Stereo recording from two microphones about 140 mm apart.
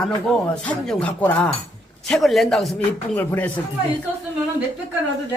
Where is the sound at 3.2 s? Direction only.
10° left (ahead or behind).